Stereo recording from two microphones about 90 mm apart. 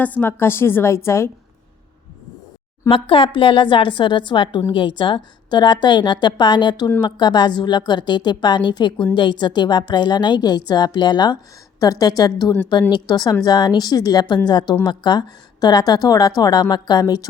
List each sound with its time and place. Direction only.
0.0 s a woman's voice: 20° left (ahead or behind)
2.9 s a woman's voice: 75° left (ahead or behind); by 17.2 s 45° left (ahead or behind)